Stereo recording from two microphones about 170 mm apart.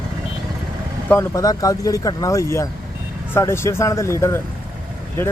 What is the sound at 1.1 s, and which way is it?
Speech, 15° left (ahead or behind).